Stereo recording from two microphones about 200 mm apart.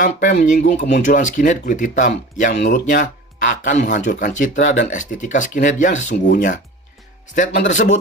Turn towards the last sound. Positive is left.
turn(degrees=35)  # may be behind; listen again after turning